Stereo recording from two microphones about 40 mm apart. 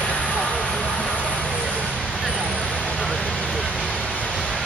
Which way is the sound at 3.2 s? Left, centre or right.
Left.